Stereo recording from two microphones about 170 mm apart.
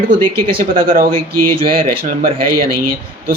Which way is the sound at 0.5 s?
55° right (ahead or behind).